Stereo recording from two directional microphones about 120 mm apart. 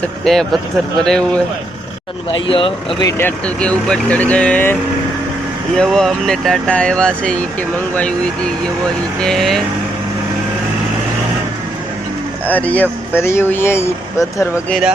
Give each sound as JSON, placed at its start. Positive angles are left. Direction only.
{"t": 0.0, "sound": "speech", "side_deg": 0}
{"t": 2.5, "sound": "speech", "side_deg": 45}
{"t": 3.2, "sound": "speech", "side_deg": 15}
{"t": 5.7, "sound": "speech", "side_deg": 5}
{"t": 9.2, "sound": "speech", "side_deg": 5}
{"t": 12.5, "sound": "speech", "side_deg": 15}
{"t": 14.7, "sound": "speech", "side_deg": -5}